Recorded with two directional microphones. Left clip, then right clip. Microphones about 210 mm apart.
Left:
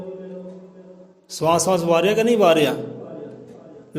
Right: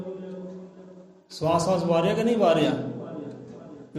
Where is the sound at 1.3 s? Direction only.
50° left (ahead or behind).